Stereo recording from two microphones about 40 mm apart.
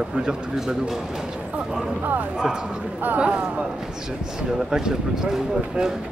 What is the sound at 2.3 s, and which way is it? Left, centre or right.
Speech, right.